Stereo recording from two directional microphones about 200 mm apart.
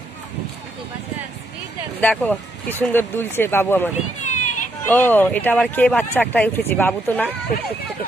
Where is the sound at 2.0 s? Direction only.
5° left (ahead or behind).